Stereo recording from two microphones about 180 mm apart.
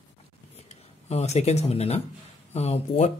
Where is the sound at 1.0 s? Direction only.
35° left (ahead or behind).